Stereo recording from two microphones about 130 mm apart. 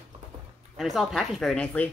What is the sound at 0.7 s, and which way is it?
Speech, centre (ahead or behind).